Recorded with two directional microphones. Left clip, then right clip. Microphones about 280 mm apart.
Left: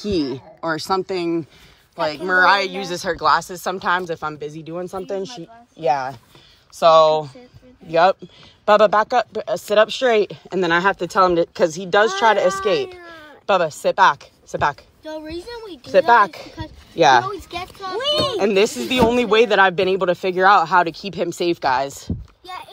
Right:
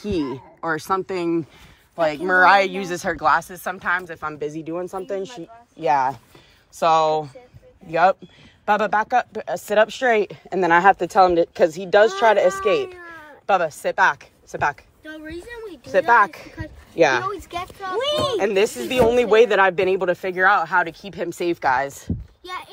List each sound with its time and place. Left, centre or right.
0.0 s speech: centre
15.9 s speech: centre
18.0 s speech: centre
18.4 s speech: centre